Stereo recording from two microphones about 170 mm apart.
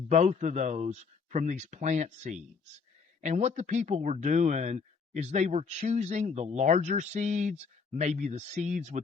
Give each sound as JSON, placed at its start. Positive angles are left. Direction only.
{"t": 0.1, "sound": "speech", "side_deg": -40}